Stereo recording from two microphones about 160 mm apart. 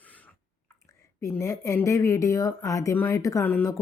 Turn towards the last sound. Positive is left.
turn(degrees=15)  # may be behind; listen again after turning